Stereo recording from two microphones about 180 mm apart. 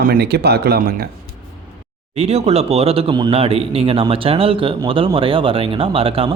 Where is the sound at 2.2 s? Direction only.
35° right (ahead or behind).